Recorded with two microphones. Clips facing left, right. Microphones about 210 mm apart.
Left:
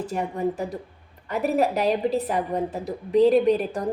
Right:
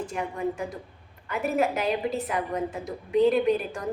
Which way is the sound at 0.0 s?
35° left (ahead or behind).